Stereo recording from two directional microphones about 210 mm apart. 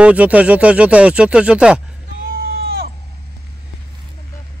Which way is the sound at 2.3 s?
45° right (ahead or behind).